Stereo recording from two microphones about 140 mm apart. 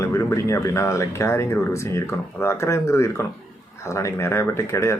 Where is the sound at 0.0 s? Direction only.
20° left (ahead or behind).